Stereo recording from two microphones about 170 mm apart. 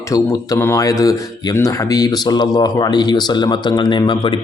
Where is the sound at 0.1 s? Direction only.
20° left (ahead or behind).